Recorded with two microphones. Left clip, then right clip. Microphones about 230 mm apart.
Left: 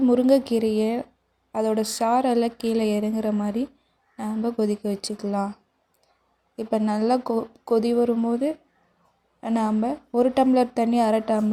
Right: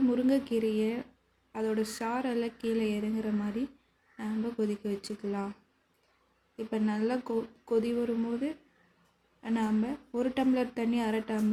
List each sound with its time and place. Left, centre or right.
0.1 s a woman's voice: left
6.6 s a woman's voice: left